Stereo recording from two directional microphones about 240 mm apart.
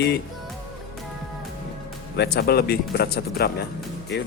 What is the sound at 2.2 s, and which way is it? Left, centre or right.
Speech, left.